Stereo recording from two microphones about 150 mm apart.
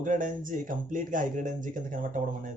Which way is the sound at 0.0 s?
60° right (ahead or behind).